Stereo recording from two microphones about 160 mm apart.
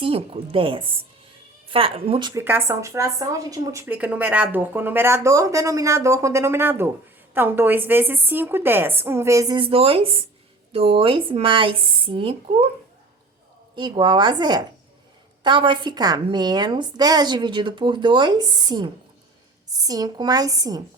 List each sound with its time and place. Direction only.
0.0 s speech: 35° right (ahead or behind)
2.4 s speech: 15° right (ahead or behind)
9.6 s speech: 35° right (ahead or behind)
13.7 s a woman's voice: 30° right (ahead or behind)